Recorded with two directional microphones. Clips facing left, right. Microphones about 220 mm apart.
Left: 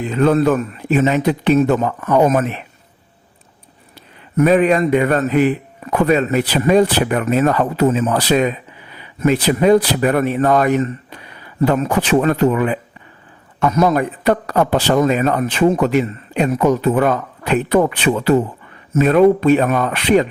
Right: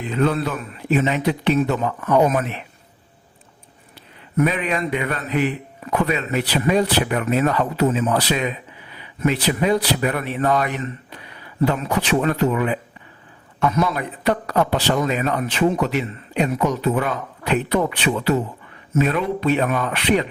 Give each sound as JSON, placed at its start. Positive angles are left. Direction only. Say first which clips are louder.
{"t": 0.0, "sound": "a man's voice", "louder": "left 6 dB", "side_deg": 45}
{"t": 4.4, "sound": "a man's voice", "louder": "left 8 dB", "side_deg": 45}